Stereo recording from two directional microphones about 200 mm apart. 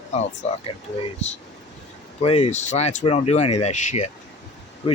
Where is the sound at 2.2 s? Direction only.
35° left (ahead or behind).